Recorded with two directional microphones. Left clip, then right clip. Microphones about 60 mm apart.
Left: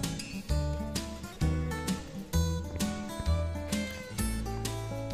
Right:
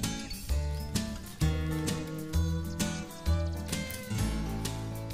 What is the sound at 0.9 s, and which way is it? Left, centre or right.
Music, centre.